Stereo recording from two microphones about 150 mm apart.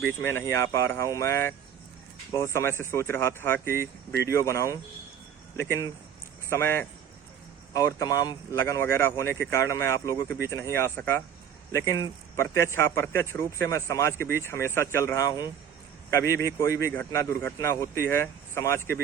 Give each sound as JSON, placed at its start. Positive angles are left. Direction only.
{"t": 0.2, "sound": "a man's voice", "side_deg": 15}
{"t": 6.5, "sound": "a man's voice", "side_deg": 15}